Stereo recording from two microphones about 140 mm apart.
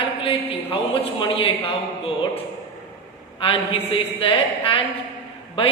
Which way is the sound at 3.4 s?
40° left (ahead or behind).